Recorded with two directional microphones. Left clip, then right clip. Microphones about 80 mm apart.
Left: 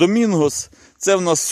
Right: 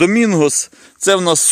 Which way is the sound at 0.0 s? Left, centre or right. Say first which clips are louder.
Right 3 dB; centre.